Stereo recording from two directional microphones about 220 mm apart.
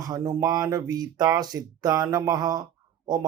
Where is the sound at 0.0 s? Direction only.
15° right (ahead or behind).